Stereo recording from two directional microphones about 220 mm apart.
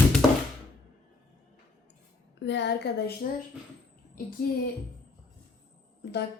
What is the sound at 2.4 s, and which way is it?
Speech, 50° left (ahead or behind).